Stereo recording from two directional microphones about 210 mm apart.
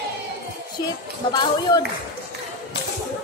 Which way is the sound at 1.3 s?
20° left (ahead or behind).